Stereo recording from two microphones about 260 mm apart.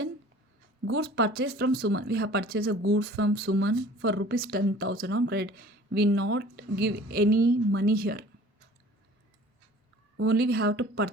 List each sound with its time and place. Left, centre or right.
0.9 s speech: right
10.2 s speech: right